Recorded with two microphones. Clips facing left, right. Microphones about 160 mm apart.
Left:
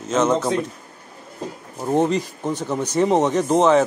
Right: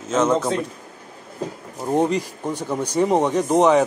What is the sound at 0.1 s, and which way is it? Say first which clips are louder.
Speech: even; 10° right (ahead or behind).